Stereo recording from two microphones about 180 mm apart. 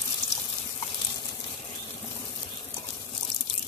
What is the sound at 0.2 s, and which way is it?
Water, 25° left (ahead or behind).